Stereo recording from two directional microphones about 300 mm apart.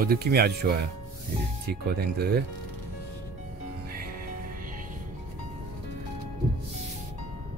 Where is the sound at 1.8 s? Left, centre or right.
Right.